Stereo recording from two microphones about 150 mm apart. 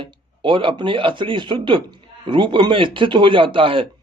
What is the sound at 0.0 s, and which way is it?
A man's voice, 35° right (ahead or behind).